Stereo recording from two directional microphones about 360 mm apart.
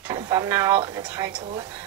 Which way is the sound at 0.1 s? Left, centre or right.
Centre.